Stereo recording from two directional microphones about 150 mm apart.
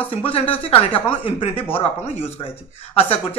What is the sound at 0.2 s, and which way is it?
Speech, 40° left (ahead or behind).